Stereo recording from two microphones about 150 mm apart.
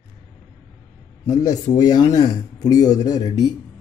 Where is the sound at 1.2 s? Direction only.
25° left (ahead or behind).